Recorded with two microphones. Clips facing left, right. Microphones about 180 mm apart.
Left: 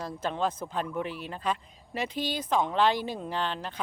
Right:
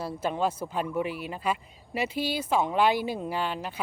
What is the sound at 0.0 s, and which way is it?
Speech, 10° right (ahead or behind).